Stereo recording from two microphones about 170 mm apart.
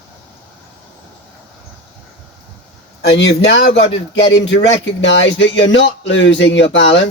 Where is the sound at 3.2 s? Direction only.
90° left.